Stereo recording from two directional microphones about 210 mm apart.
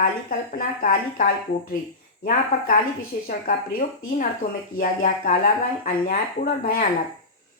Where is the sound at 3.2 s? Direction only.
40° left (ahead or behind).